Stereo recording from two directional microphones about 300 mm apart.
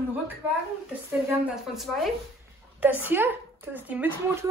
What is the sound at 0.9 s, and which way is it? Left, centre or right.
A woman's voice, centre.